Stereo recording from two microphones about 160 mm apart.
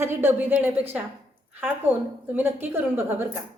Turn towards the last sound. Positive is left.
turn(degrees=-15)  # may be behind; listen again after turning